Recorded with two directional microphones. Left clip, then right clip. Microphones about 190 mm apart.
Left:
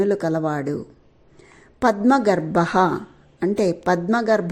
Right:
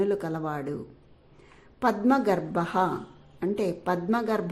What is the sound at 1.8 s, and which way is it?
A woman's voice, 30° left (ahead or behind).